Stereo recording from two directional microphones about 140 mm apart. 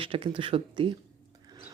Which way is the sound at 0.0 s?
40° right (ahead or behind).